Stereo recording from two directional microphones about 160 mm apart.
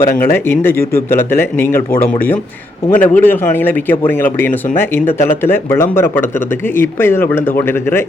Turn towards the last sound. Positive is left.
turn(degrees=15)  # may be behind; listen again after turning